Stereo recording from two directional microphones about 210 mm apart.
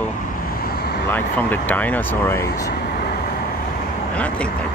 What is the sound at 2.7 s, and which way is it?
Vehicle, 45° left (ahead or behind).